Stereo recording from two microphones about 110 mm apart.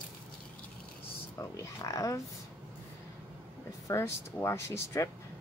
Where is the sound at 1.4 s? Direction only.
25° left (ahead or behind).